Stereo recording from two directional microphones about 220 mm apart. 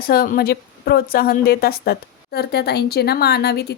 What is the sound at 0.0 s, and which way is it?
A woman's voice, 40° left (ahead or behind).